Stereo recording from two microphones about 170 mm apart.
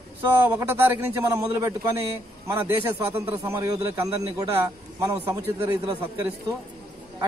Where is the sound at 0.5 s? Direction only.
10° right (ahead or behind).